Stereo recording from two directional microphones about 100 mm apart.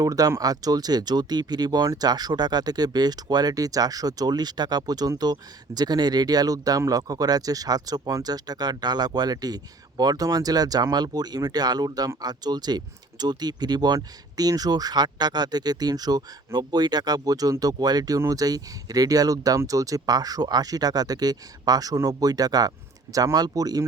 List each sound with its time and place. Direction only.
0.0 s speech: 35° right (ahead or behind)